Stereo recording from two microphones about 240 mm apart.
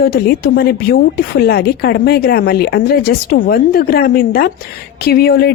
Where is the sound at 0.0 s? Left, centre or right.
Left.